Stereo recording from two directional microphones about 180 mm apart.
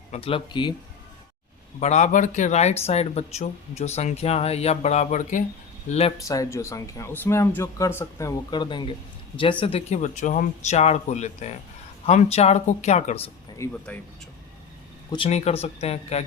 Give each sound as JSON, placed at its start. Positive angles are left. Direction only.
{"t": 0.1, "sound": "speech", "side_deg": 30}
{"t": 1.8, "sound": "speech", "side_deg": 40}
{"t": 6.2, "sound": "speech", "side_deg": 15}
{"t": 8.4, "sound": "speech", "side_deg": 25}
{"t": 13.6, "sound": "speech", "side_deg": 10}
{"t": 15.1, "sound": "speech", "side_deg": 35}